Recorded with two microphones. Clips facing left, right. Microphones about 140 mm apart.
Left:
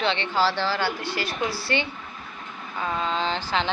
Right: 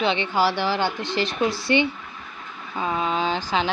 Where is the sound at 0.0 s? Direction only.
15° right (ahead or behind).